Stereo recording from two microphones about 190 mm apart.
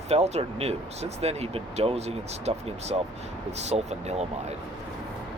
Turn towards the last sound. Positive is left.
turn(degrees=-35)  # may be behind; listen again after turning